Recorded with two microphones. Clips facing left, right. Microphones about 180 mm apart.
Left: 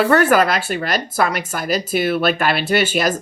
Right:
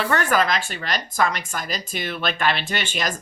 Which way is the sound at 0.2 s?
10° left (ahead or behind).